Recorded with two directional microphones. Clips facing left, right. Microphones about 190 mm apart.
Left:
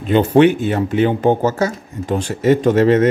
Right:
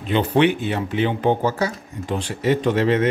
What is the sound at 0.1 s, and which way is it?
Speech, 45° left (ahead or behind).